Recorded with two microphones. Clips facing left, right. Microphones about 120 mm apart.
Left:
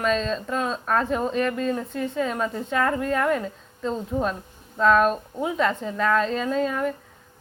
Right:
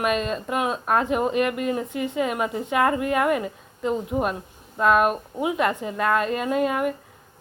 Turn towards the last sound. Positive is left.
turn(degrees=-10)  # may be behind; listen again after turning